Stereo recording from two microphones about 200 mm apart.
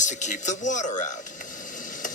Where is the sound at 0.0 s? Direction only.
35° left (ahead or behind).